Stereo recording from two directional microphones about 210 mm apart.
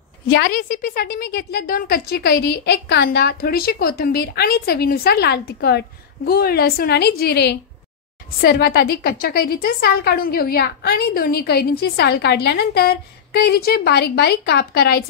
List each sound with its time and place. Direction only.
0.3 s a woman's voice: 45° left (ahead or behind)